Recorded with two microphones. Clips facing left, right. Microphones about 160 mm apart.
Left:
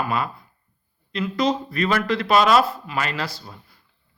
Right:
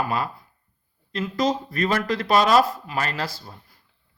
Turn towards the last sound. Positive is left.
turn(degrees=-40)  # may be behind; listen again after turning